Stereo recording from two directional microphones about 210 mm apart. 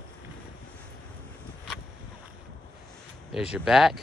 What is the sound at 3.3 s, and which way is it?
Speech, 5° right (ahead or behind).